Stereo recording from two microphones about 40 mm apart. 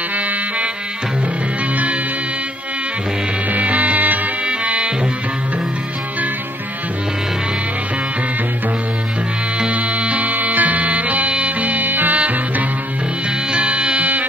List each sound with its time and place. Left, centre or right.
3.5 s music: right
4.5 s music: right
9.6 s music: right
13.5 s music: right